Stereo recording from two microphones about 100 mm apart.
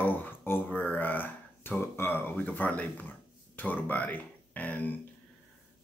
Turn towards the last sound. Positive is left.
turn(degrees=15)  # may be behind; listen again after turning